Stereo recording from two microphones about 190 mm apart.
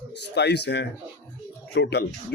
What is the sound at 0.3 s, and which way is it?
Speech, 60° left (ahead or behind).